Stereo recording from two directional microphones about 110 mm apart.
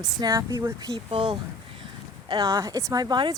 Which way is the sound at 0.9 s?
50° right (ahead or behind).